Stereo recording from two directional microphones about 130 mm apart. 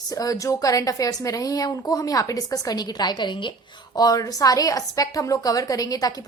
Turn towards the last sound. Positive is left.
turn(degrees=30)  # may be behind; listen again after turning